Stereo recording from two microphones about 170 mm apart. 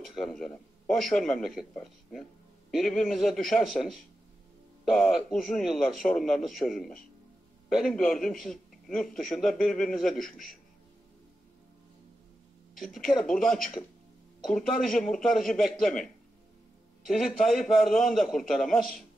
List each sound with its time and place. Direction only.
0.0 s a man's voice: centre (ahead or behind)
12.7 s a man's voice: centre (ahead or behind)
17.1 s a man's voice: centre (ahead or behind)